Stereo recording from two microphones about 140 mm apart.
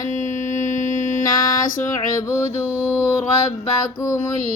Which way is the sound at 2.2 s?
20° left (ahead or behind).